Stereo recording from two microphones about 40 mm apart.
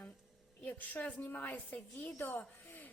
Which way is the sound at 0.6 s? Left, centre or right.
Left.